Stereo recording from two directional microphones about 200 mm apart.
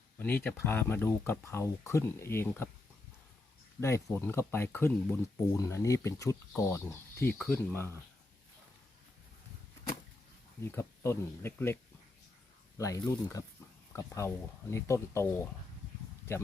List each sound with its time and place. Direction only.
0.2 s speech: 10° left (ahead or behind)
3.8 s speech: 15° left (ahead or behind)
10.6 s speech: 10° left (ahead or behind)